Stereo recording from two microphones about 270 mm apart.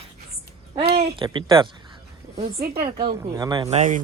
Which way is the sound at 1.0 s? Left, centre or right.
Centre.